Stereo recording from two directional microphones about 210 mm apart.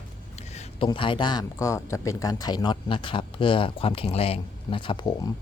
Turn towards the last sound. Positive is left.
turn(degrees=20)  # may be behind; listen again after turning